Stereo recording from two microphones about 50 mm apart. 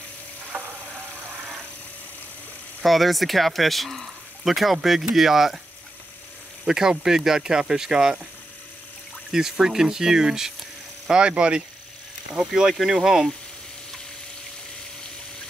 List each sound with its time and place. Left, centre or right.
0.5 s a sound: right
2.8 s speech: centre
6.6 s speech: centre
9.3 s speech: centre